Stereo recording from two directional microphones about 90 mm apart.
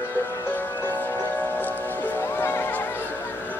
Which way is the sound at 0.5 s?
20° left (ahead or behind).